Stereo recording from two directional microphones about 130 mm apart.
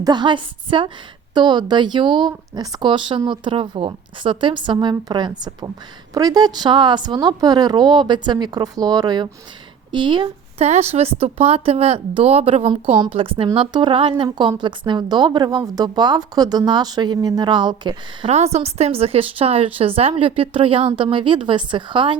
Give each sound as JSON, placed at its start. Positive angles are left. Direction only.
{"t": 0.0, "sound": "a woman's voice", "side_deg": -35}
{"t": 10.6, "sound": "a woman's voice", "side_deg": -55}
{"t": 18.3, "sound": "a woman's voice", "side_deg": -55}